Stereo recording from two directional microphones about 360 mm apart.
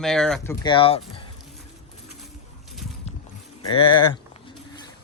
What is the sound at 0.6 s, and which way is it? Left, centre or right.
Speech, centre.